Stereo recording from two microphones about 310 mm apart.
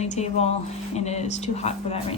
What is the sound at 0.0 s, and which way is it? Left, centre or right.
A woman's voice, left.